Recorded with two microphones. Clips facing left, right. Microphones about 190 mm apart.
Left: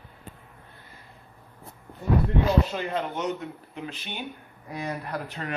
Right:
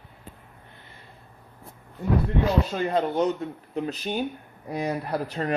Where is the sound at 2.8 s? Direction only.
40° right (ahead or behind).